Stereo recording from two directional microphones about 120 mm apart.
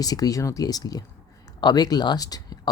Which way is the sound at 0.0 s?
30° left (ahead or behind).